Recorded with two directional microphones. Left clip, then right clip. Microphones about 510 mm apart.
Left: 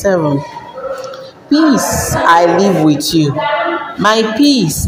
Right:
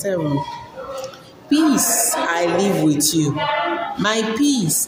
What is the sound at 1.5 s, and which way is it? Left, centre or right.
Speech, right.